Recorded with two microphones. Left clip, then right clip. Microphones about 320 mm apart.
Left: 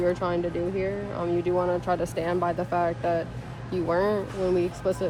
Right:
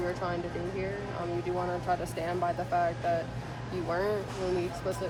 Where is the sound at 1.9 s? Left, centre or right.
Centre.